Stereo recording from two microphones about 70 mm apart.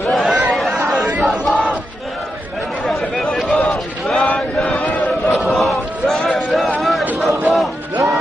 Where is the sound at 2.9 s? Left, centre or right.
Centre.